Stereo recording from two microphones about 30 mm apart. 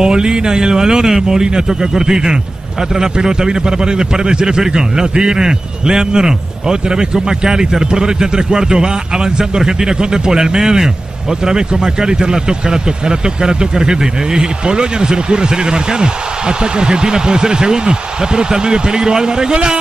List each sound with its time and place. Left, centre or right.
0.0 s speech: right